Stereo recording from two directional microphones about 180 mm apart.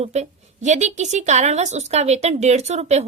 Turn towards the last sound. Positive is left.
turn(degrees=-35)  # may be behind; listen again after turning